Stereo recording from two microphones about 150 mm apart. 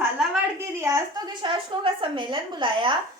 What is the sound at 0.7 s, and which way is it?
A woman's voice, 20° right (ahead or behind).